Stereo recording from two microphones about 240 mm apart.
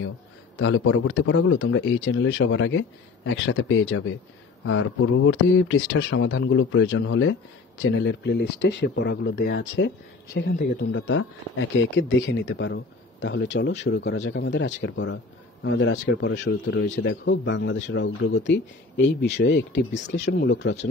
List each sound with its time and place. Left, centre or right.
0.6 s speech: left